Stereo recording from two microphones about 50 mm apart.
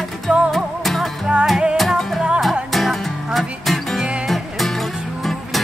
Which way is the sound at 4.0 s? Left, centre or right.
Centre.